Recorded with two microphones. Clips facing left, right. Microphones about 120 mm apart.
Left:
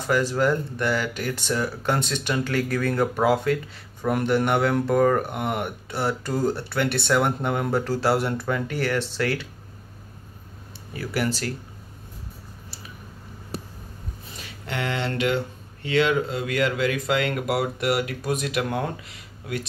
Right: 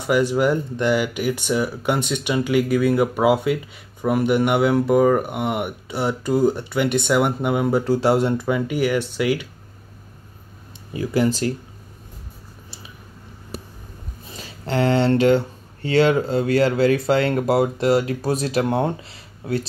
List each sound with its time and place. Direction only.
0.0 s speech: 10° right (ahead or behind)
10.9 s speech: 20° right (ahead or behind)
14.4 s speech: 35° right (ahead or behind)